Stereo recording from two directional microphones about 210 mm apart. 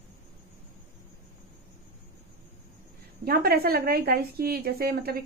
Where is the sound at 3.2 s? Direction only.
45° right (ahead or behind).